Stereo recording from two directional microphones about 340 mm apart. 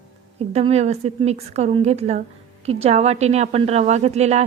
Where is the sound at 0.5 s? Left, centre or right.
Centre.